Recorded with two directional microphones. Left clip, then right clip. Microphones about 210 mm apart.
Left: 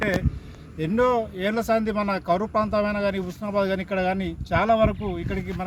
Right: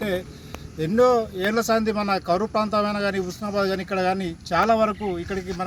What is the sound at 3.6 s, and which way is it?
Speech, 30° left (ahead or behind).